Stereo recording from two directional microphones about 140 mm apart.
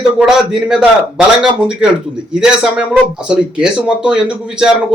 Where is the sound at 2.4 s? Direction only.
5° right (ahead or behind).